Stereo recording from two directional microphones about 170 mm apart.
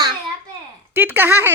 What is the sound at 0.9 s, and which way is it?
Speech, 10° right (ahead or behind).